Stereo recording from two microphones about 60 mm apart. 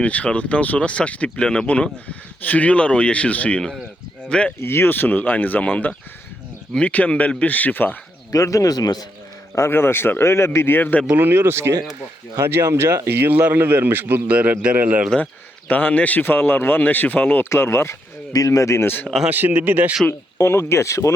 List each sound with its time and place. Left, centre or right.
0.0 s speech: left
4.6 s speech: left
8.3 s a man's voice: left
9.6 s speech: left
11.1 s a man's voice: right
15.7 s speech: left
17.5 s speech: left
18.3 s speech: left
19.3 s a man's voice: right
20.4 s speech: left